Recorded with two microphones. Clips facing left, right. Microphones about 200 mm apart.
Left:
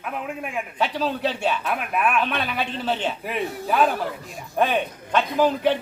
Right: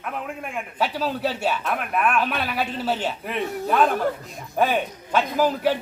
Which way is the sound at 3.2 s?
5° left (ahead or behind).